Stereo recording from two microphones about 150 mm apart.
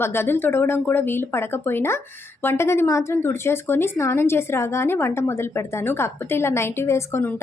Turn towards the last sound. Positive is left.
turn(degrees=15)  # may be behind; listen again after turning